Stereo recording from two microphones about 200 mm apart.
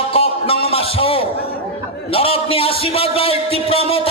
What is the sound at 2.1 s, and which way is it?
A man's voice, 30° left (ahead or behind).